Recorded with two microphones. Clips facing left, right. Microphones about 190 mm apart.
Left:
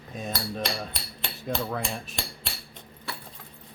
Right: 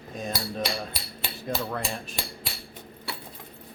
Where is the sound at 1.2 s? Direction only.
5° right (ahead or behind).